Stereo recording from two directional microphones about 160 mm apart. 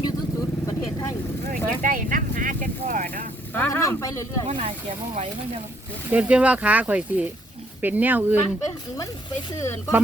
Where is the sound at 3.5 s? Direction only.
15° left (ahead or behind).